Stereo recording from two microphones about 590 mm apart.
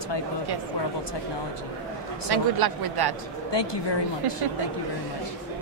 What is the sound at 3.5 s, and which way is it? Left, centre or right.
Speech, left.